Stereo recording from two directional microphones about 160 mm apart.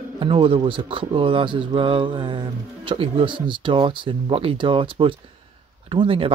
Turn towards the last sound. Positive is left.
turn(degrees=-35)  # may be behind; listen again after turning